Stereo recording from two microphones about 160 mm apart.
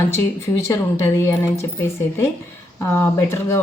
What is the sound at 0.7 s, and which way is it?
Speech, 15° left (ahead or behind).